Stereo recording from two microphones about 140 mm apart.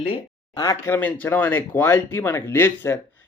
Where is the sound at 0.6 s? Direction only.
20° left (ahead or behind).